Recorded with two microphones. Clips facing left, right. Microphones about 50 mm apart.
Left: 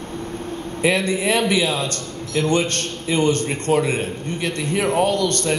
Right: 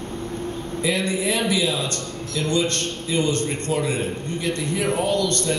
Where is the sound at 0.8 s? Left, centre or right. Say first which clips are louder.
Left 4 dB; left.